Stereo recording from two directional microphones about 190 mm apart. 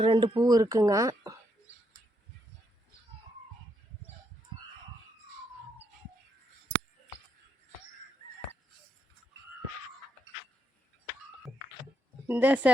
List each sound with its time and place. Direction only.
0.0 s speech: 25° right (ahead or behind)
12.3 s speech: 10° right (ahead or behind)